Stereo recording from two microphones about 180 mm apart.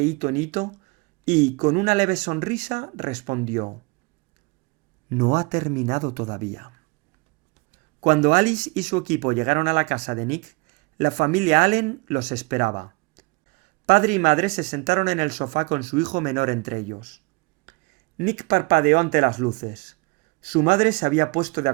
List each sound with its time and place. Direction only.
0.0 s speech: 45° right (ahead or behind)
5.0 s speech: 45° right (ahead or behind)
8.0 s speech: 45° right (ahead or behind)
17.7 s a sound: 45° right (ahead or behind)
18.2 s speech: 45° right (ahead or behind)